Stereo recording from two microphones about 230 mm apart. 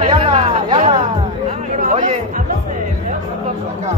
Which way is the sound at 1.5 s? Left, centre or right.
Right.